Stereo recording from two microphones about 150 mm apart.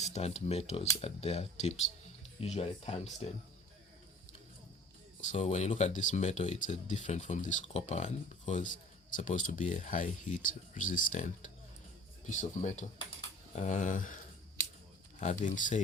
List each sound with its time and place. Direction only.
0.0 s speech: 45° left (ahead or behind)
5.2 s speech: 50° left (ahead or behind)
15.2 s speech: 55° left (ahead or behind)